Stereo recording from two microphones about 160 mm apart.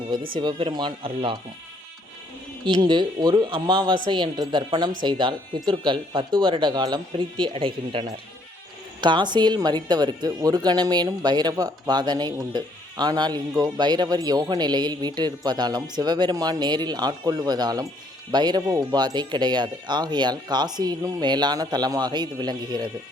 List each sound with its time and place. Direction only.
0.3 s speech: 30° right (ahead or behind)
2.6 s speech: 30° right (ahead or behind)